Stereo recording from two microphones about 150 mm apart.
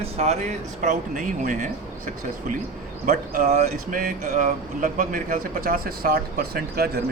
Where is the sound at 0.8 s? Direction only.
60° right (ahead or behind).